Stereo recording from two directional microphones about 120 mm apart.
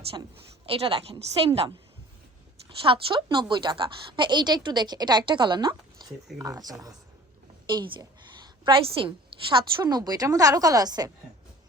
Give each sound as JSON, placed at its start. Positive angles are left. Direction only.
{"t": 0.6, "sound": "a woman's voice", "side_deg": -50}
{"t": 2.6, "sound": "a woman's voice", "side_deg": -45}
{"t": 7.7, "sound": "a woman's voice", "side_deg": -40}